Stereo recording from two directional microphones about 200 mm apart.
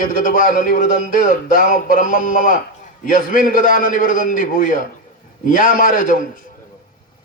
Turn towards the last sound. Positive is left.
turn(degrees=45)  # may be behind; listen again after turning